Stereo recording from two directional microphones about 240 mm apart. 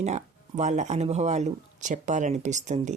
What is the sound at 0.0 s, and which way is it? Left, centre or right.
Speech, right.